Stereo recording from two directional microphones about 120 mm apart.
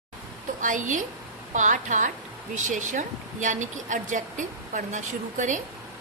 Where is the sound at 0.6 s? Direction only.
90° right.